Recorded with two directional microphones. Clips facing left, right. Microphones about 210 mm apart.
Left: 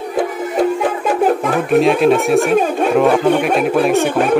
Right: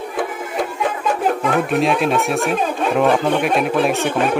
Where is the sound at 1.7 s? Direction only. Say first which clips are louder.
Left 10 dB; centre (ahead or behind).